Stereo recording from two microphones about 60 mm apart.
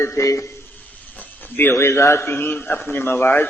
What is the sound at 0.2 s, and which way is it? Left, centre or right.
Speech, left.